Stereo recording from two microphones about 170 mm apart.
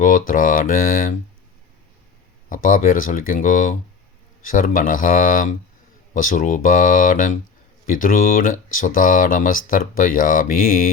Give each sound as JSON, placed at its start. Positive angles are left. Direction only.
{"t": 0.0, "sound": "speech", "side_deg": 50}
{"t": 2.5, "sound": "speech", "side_deg": 50}